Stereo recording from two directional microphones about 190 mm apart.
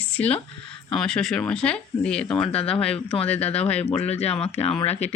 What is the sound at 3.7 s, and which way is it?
Speech, 35° left (ahead or behind).